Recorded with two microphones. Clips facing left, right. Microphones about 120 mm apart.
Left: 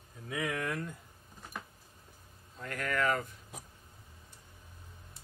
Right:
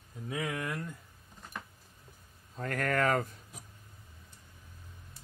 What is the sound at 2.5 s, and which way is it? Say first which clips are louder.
Speech: right 4 dB; 45° right (ahead or behind).